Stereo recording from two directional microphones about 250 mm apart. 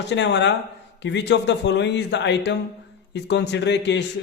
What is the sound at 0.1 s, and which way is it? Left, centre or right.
Speech, left.